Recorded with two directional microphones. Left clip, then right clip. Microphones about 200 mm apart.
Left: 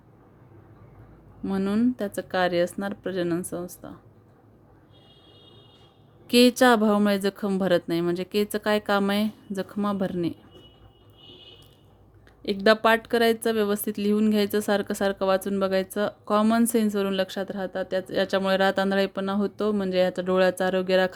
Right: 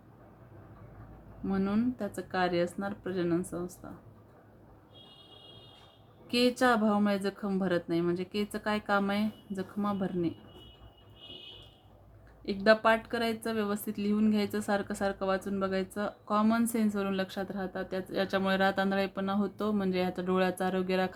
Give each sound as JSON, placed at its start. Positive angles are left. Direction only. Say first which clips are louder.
{"t": 1.5, "sound": "speech", "louder": "left 6 dB", "side_deg": 40}
{"t": 6.2, "sound": "speech", "louder": "left 8 dB", "side_deg": 50}
{"t": 12.4, "sound": "speech", "louder": "left 5 dB", "side_deg": 45}